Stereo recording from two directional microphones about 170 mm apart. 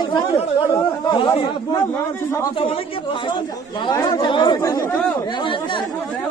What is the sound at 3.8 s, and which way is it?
Speech, 25° left (ahead or behind).